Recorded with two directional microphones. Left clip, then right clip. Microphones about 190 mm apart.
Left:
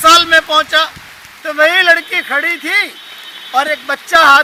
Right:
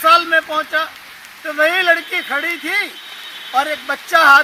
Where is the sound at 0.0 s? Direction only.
20° left (ahead or behind).